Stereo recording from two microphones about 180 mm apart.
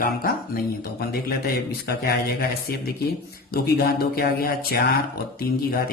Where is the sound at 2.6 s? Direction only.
60° left (ahead or behind).